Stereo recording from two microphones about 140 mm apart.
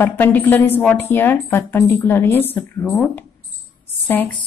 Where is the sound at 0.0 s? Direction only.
15° left (ahead or behind).